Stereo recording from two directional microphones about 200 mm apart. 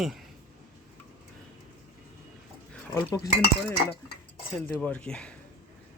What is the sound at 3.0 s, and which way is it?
Speech, 15° left (ahead or behind).